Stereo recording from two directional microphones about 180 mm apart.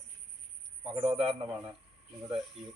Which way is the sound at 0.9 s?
30° right (ahead or behind).